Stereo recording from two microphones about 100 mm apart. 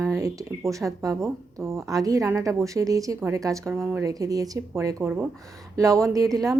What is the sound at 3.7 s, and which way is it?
Speech, 25° right (ahead or behind).